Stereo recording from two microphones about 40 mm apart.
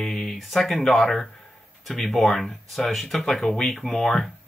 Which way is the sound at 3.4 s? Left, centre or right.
Left.